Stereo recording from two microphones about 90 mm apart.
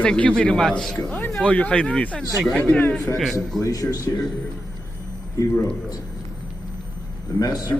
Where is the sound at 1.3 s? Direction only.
5° left (ahead or behind).